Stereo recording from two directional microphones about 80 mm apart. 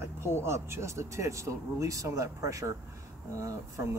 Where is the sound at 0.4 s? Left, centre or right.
Right.